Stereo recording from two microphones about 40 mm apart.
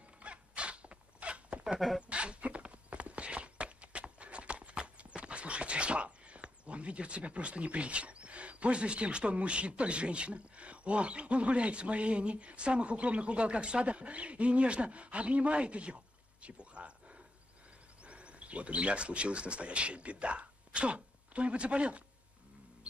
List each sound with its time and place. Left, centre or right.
0.2 s a sound: right
2.0 s horse: right
18.0 s speech: right